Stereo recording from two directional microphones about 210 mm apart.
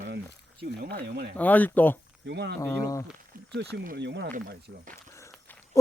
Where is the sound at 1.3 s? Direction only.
5° left (ahead or behind).